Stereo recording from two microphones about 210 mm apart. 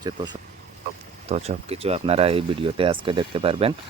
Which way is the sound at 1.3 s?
30° right (ahead or behind).